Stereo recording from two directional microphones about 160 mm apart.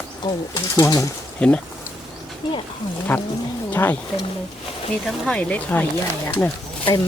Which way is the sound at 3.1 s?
10° left (ahead or behind).